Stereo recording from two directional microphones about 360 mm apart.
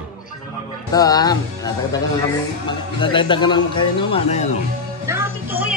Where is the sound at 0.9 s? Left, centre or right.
Centre.